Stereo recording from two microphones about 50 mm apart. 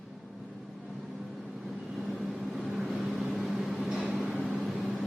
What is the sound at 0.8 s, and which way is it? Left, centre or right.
Vehicle, centre.